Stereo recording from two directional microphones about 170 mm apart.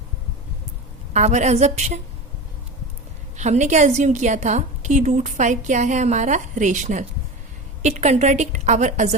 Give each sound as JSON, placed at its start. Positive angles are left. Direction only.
{"t": 1.1, "sound": "a woman's voice", "side_deg": -45}
{"t": 3.3, "sound": "a woman's voice", "side_deg": -45}